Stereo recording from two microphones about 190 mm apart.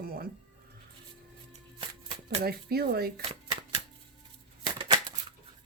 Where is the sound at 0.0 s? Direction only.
50° right (ahead or behind).